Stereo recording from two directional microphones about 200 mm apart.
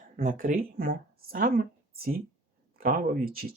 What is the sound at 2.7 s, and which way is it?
Speech, 45° right (ahead or behind).